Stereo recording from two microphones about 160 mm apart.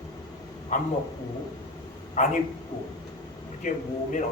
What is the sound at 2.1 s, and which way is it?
Speech, 50° left (ahead or behind).